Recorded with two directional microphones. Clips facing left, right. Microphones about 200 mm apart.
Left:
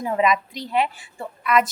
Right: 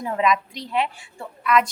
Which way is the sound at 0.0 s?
Centre (ahead or behind).